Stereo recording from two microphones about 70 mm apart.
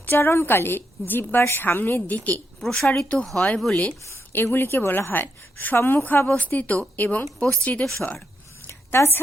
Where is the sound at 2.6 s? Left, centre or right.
Centre.